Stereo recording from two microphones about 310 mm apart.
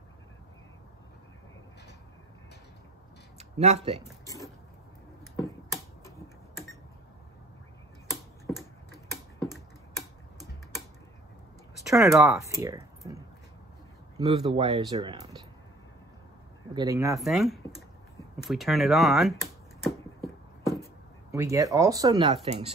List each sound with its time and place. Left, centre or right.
3.3 s speech: right
6.0 s a sound: centre
8.1 s tick-tock: centre
11.8 s speech: centre
16.7 s speech: centre
18.4 s a sound: centre
21.3 s speech: centre